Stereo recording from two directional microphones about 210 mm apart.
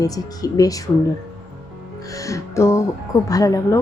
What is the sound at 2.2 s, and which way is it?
A woman's voice, 15° left (ahead or behind).